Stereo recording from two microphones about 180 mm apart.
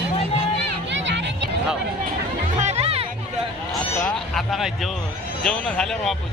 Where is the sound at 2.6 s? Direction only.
35° right (ahead or behind).